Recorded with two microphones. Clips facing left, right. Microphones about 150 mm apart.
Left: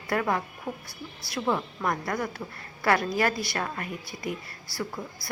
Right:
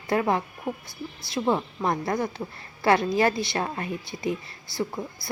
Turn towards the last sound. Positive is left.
turn(degrees=-25)  # may be behind; listen again after turning